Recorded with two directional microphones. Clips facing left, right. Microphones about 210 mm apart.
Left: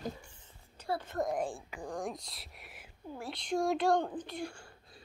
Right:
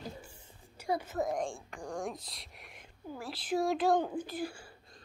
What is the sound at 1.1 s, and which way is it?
Speech, centre (ahead or behind).